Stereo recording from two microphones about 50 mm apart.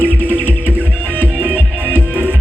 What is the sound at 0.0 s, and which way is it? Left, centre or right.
Music, left.